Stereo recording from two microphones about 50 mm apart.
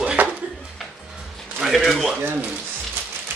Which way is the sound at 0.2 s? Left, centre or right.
Right.